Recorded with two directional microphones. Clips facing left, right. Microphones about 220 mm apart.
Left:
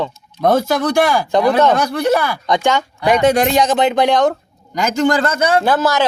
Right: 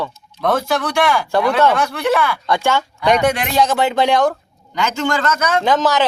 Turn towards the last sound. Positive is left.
turn(degrees=10)  # may be behind; listen again after turning